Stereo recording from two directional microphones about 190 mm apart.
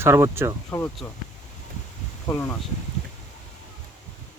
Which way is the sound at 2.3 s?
10° left (ahead or behind).